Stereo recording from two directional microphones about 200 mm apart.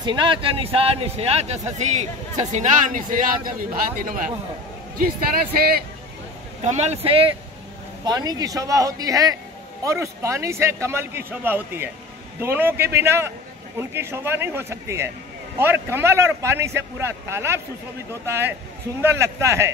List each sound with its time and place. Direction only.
0.0 s a man's voice: 25° right (ahead or behind); by 5.8 s 50° right (ahead or behind)
6.6 s a man's voice: 35° right (ahead or behind); by 19.7 s 15° right (ahead or behind)